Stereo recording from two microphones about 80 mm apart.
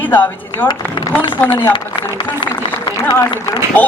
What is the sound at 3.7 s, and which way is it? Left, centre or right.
Speech, left.